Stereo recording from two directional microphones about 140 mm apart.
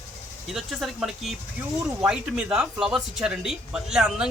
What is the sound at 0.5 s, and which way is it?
Speech, centre (ahead or behind).